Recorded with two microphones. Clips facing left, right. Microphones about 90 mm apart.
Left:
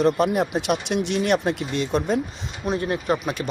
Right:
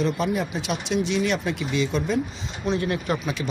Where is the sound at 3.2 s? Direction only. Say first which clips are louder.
Left 1 dB; 50° left (ahead or behind).